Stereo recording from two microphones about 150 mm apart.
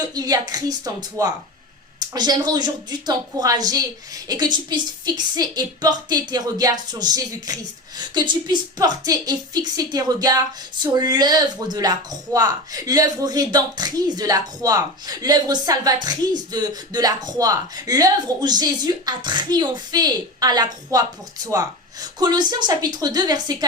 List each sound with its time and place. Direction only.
0.0 s speech: 25° right (ahead or behind)